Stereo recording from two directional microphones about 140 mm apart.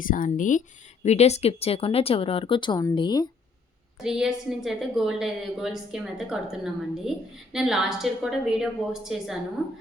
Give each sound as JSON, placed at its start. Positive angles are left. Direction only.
{"t": 0.0, "sound": "speech", "side_deg": 75}
{"t": 1.0, "sound": "speech", "side_deg": 50}
{"t": 4.0, "sound": "a woman's voice", "side_deg": -5}